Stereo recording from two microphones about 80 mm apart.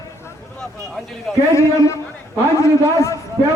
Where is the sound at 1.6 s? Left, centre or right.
Left.